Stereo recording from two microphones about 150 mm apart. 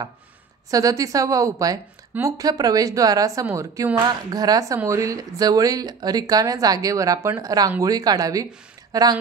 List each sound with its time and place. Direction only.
0.7 s a woman's voice: 25° right (ahead or behind)